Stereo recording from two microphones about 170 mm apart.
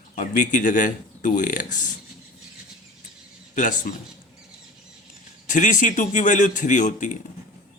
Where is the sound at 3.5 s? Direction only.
50° left (ahead or behind).